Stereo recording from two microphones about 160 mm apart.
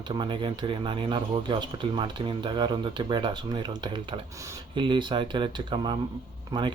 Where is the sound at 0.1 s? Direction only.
30° right (ahead or behind).